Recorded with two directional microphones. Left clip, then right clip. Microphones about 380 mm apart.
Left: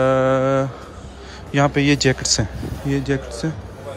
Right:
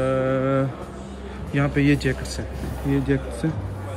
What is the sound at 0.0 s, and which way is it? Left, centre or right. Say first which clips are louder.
Mantra: left 6 dB; centre.